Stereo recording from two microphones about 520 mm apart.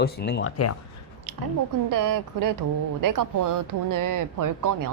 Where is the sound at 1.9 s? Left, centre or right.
Right.